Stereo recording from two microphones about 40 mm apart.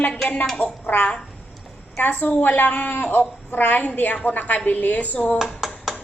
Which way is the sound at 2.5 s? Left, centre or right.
Left.